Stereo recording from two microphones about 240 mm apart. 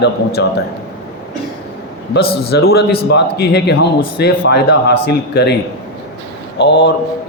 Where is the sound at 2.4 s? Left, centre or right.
Left.